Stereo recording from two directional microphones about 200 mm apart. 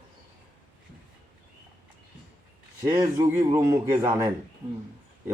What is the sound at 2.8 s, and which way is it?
Speech, 20° right (ahead or behind).